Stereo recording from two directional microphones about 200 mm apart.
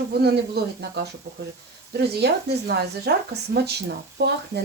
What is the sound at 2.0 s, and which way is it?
Speech, 55° right (ahead or behind).